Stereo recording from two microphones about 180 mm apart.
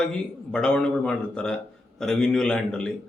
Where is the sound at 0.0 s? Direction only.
5° left (ahead or behind).